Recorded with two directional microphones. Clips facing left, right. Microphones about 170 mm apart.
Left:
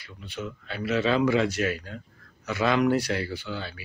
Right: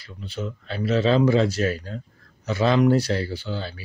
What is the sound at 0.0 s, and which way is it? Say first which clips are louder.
A man's voice: right 4 dB; 35° right (ahead or behind).